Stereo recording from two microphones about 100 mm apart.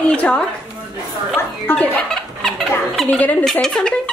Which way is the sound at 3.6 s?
5° left (ahead or behind).